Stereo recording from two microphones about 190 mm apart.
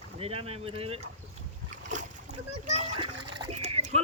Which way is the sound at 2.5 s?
35° right (ahead or behind).